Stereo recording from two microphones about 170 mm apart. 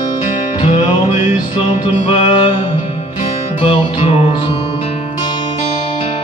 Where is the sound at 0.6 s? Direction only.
35° left (ahead or behind).